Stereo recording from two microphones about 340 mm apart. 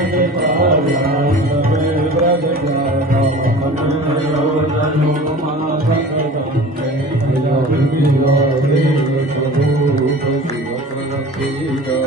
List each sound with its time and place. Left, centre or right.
0.2 s music: right